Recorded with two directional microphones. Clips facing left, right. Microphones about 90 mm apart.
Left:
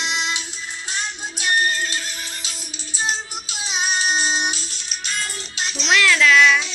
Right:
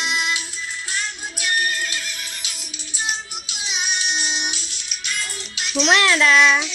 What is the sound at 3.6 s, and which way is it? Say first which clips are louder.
Music: left 4 dB; 35° left (ahead or behind).